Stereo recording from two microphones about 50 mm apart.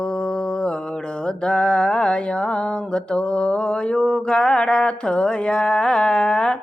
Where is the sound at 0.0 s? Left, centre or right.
Centre.